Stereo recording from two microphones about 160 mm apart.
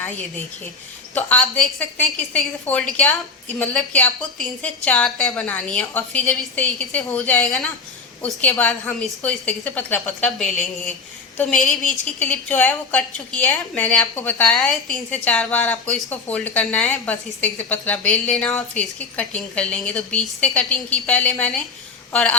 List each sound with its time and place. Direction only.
1.3 s a woman's voice: 5° left (ahead or behind)
10.5 s speech: 55° left (ahead or behind)
11.9 s a woman's voice: 5° left (ahead or behind)